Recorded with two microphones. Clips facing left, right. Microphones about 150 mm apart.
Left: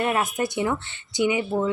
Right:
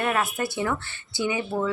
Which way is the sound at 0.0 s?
20° left (ahead or behind).